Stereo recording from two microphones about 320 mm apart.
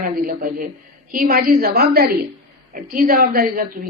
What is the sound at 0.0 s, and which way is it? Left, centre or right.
A woman's voice, right.